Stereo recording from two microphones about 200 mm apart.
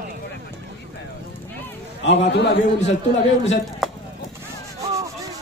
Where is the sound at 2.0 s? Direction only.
55° left (ahead or behind).